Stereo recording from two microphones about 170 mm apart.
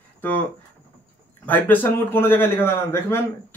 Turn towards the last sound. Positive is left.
turn(degrees=15)  # may be behind; listen again after turning